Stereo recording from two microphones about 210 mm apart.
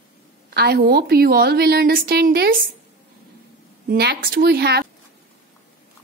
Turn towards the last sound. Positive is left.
turn(degrees=-50)  # may be behind; listen again after turning